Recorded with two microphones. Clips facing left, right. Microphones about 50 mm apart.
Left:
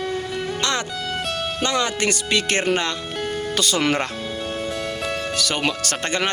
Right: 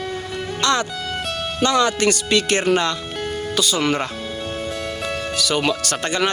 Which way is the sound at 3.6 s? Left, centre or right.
Left.